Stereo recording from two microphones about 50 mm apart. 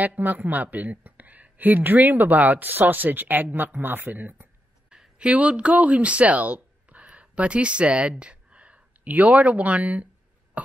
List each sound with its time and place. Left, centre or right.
0.0 s speech: right
4.8 s a sound: centre
5.2 s speech: right